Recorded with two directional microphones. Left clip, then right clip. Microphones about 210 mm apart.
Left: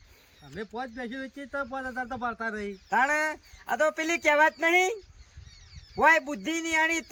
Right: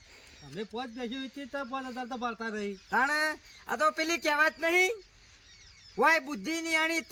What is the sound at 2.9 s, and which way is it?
A man's voice, 30° left (ahead or behind).